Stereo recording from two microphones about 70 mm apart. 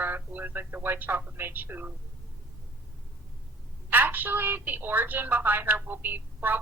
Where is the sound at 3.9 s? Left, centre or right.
Right.